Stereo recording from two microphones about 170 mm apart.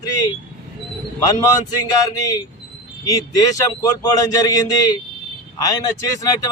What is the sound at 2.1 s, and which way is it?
A man's voice, 20° left (ahead or behind).